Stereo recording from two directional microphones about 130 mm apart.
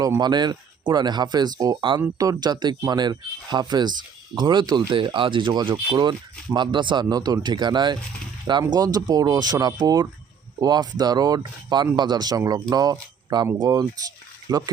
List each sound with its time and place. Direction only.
0.2 s speech: 35° right (ahead or behind)